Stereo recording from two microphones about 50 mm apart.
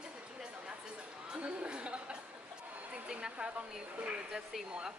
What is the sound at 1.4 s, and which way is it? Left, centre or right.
A woman's voice, right.